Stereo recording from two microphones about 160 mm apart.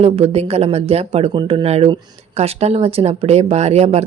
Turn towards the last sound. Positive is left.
turn(degrees=-40)  # may be behind; listen again after turning